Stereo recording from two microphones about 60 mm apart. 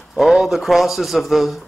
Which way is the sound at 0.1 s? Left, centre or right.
Centre.